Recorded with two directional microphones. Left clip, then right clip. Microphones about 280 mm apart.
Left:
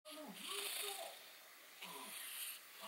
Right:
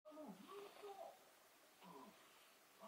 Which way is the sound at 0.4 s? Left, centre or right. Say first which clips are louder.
Left 11 dB; centre.